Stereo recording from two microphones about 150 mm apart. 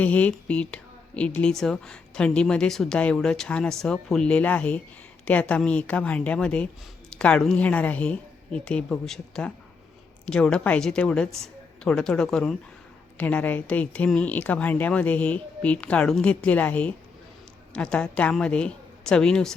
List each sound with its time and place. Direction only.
0.0 s speech: 10° left (ahead or behind)